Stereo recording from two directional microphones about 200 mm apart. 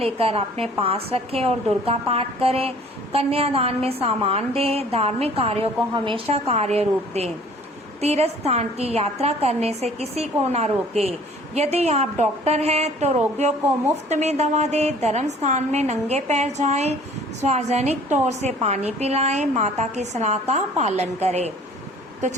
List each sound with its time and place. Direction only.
0.0 s a woman's voice: 30° right (ahead or behind)